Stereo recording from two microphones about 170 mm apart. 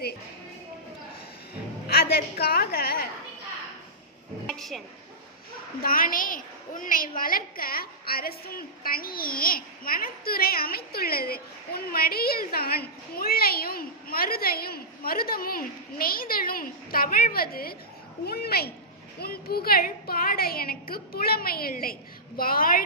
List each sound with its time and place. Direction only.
1.9 s a woman's voice: 65° left (ahead or behind)
4.4 s a sound: centre (ahead or behind)
5.8 s a woman's voice: 55° left (ahead or behind)